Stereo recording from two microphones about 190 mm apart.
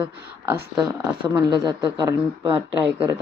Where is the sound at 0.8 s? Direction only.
20° right (ahead or behind).